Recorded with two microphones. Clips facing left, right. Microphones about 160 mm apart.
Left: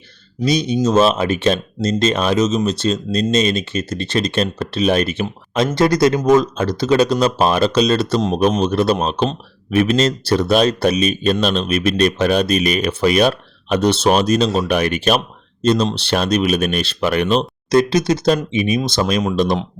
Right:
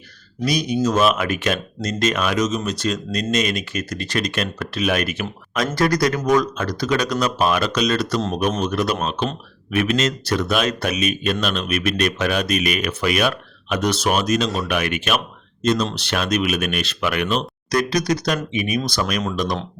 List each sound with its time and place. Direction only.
0.4 s a man's voice: 25° left (ahead or behind)